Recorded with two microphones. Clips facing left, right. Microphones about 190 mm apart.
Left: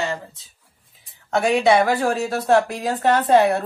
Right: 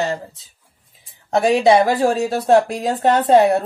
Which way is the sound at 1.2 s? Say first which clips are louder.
Right 3 dB; 35° right (ahead or behind).